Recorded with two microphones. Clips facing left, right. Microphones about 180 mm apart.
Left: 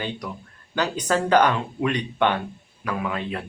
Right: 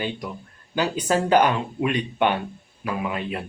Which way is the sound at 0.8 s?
10° right (ahead or behind).